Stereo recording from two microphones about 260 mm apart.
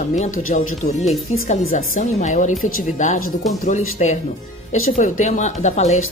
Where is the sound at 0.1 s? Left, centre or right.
Left.